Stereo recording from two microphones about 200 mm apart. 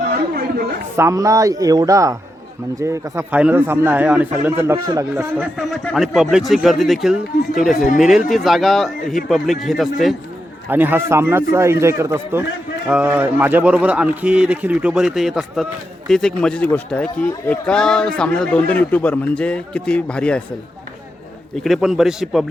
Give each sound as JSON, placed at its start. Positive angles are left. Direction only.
{"t": 0.9, "sound": "a man's voice", "side_deg": -15}
{"t": 21.5, "sound": "speech", "side_deg": 0}